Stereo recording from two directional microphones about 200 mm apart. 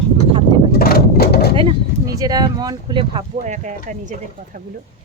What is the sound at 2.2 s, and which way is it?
Speech, 20° right (ahead or behind).